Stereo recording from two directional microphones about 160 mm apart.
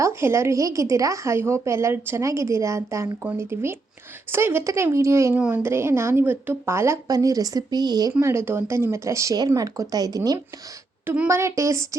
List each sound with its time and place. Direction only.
0.0 s speech: 15° right (ahead or behind)
11.0 s speech: 10° right (ahead or behind)